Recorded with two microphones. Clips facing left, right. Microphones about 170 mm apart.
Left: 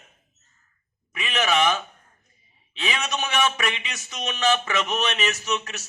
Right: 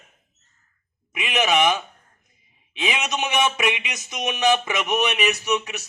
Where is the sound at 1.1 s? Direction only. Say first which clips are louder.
Right 2 dB; 15° right (ahead or behind).